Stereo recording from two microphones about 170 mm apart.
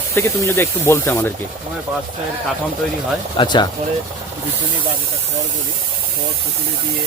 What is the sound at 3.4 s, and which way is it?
Speech, 25° left (ahead or behind).